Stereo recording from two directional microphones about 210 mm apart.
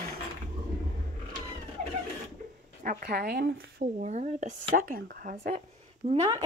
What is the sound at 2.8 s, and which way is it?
Speech, 45° right (ahead or behind).